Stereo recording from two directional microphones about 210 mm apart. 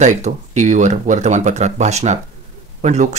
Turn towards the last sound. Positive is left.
turn(degrees=-35)  # may be behind; listen again after turning